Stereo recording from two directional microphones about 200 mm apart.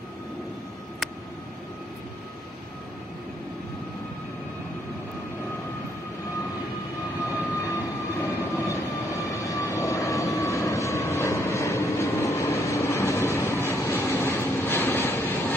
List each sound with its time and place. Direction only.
7.6 s vehicle: 15° left (ahead or behind)